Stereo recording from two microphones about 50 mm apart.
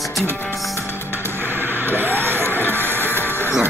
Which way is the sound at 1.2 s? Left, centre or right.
Right.